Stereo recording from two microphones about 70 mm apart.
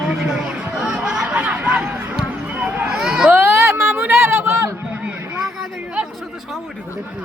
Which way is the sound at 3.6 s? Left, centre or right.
Right.